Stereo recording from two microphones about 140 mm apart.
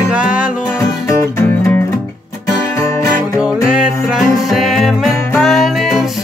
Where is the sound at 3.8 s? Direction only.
5° right (ahead or behind).